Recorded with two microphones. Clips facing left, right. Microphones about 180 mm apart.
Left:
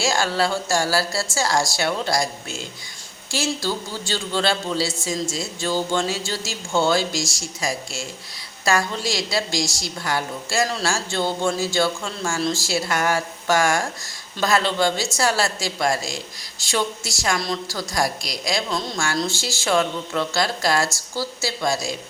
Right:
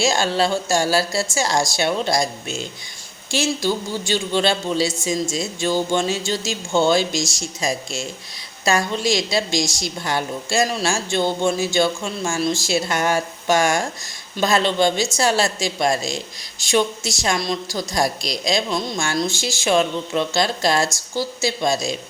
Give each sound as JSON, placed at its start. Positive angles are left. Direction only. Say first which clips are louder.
{"t": 0.0, "sound": "speech", "louder": "right 2 dB", "side_deg": -20}